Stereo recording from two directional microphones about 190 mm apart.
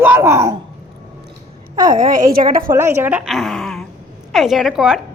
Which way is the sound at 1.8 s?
45° right (ahead or behind).